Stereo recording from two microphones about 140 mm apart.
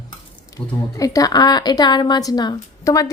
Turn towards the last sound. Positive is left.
turn(degrees=25)  # may be behind; listen again after turning